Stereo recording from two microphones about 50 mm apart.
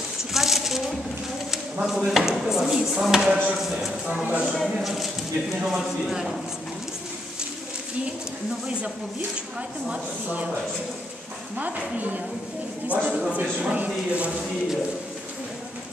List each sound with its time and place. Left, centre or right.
0.2 s a sound: centre
1.5 s speech: centre
4.2 s speech: right
4.5 s speech: centre
9.6 s a woman's voice: right